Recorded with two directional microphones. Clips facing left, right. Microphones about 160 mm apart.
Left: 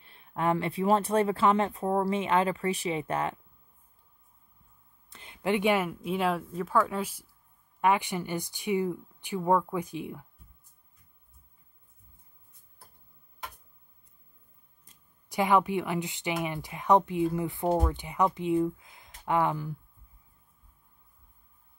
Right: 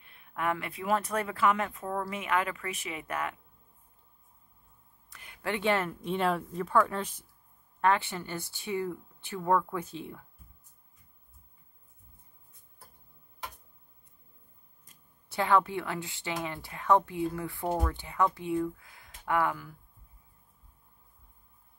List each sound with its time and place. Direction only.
0.0 s speech: 30° left (ahead or behind)
5.1 s speech: 25° left (ahead or behind)
15.2 s speech: 15° left (ahead or behind)